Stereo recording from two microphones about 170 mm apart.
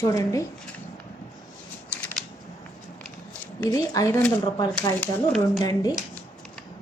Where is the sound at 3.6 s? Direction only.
20° left (ahead or behind).